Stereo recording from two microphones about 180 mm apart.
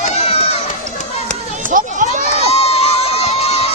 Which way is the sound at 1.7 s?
45° right (ahead or behind).